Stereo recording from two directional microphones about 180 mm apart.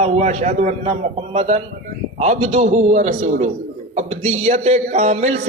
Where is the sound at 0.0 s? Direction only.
35° right (ahead or behind).